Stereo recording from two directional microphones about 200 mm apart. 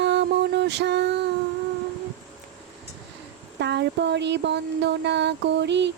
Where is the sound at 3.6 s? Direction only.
60° right (ahead or behind).